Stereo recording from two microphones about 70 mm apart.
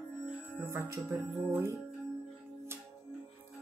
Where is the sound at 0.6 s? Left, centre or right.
Right.